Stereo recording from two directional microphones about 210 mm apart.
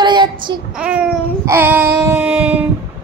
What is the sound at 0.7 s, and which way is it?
Speech, 5° right (ahead or behind).